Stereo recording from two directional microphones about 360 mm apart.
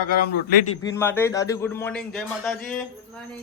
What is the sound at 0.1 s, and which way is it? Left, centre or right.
Speech, left.